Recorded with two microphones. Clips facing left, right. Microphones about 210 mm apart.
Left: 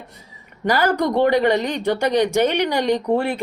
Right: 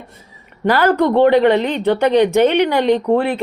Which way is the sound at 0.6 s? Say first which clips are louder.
Right 5 dB; 55° right (ahead or behind).